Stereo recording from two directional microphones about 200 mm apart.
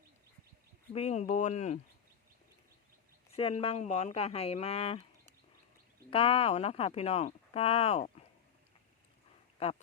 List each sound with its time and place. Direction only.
0.9 s speech: 35° left (ahead or behind)
3.3 s speech: 30° left (ahead or behind)
6.1 s speech: 25° left (ahead or behind)